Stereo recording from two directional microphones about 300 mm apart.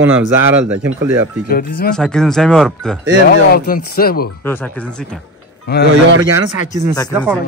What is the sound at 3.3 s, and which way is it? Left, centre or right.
Speech, left.